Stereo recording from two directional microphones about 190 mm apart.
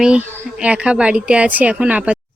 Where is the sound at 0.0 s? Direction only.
5° right (ahead or behind).